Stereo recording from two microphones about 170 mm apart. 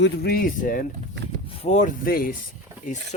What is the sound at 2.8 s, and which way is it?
Speech, 45° left (ahead or behind).